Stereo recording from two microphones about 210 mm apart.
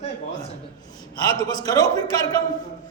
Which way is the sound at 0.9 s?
20° left (ahead or behind).